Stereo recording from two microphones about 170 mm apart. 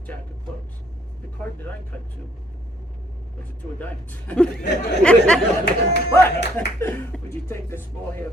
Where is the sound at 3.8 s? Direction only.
10° left (ahead or behind).